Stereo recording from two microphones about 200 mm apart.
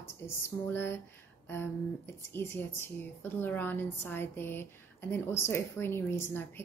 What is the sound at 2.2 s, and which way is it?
A woman's voice, 10° left (ahead or behind).